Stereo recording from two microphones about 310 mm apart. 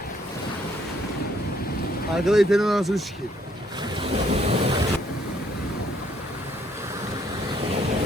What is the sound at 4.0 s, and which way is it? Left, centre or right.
Waves, centre.